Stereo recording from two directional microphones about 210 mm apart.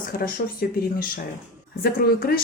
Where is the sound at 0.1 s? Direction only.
45° left (ahead or behind).